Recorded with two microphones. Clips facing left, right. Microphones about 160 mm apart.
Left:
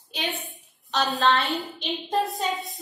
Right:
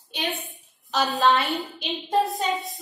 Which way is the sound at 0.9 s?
Centre (ahead or behind).